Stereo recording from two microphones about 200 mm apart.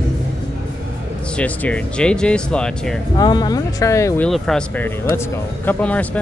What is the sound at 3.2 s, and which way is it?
Speech, 20° left (ahead or behind).